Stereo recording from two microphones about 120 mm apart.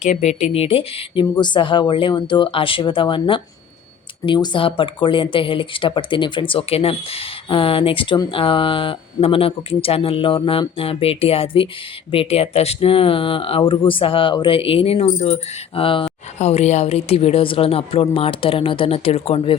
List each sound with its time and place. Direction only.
0.0 s speech: 75° left (ahead or behind); by 19.5 s 55° left (ahead or behind)